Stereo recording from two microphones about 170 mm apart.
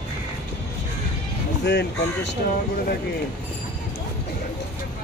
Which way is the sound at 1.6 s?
90° left.